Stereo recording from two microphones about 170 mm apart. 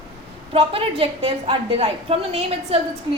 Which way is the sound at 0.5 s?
35° right (ahead or behind).